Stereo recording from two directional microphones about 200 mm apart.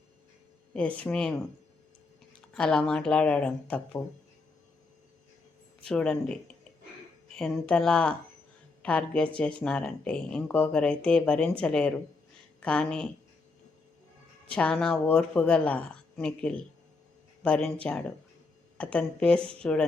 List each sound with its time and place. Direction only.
0.7 s speech: 5° left (ahead or behind)
2.5 s speech: 5° left (ahead or behind)
5.8 s speech: 5° left (ahead or behind)
14.5 s speech: 5° left (ahead or behind)